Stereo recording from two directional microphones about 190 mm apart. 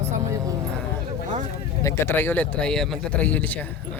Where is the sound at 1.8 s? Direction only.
15° left (ahead or behind).